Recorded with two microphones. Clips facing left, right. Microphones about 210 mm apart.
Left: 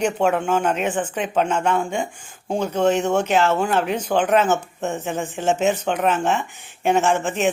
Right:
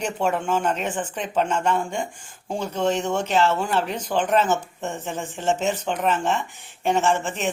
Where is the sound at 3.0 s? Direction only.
40° left (ahead or behind).